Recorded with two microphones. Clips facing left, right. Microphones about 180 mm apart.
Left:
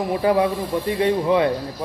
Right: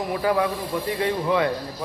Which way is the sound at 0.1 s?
25° left (ahead or behind).